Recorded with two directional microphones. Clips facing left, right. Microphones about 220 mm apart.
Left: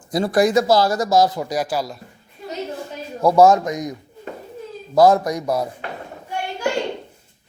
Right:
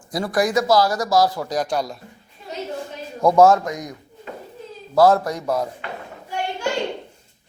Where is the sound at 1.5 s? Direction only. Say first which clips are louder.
Even; 5° left (ahead or behind).